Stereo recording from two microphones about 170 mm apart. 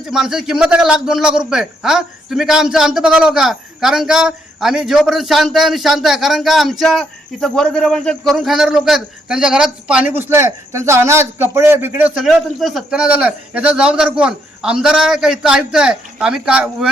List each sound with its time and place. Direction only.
0.0 s a man's voice: 5° right (ahead or behind)